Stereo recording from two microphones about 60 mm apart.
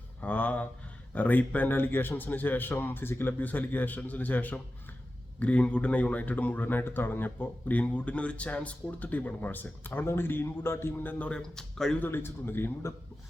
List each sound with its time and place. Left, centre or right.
0.2 s a man's voice: left
11.3 s speech: centre
11.9 s a man's voice: left